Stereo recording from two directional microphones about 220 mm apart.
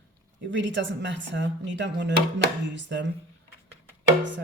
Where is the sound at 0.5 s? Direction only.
55° right (ahead or behind).